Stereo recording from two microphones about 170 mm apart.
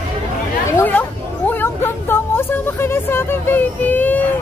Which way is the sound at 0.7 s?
15° left (ahead or behind).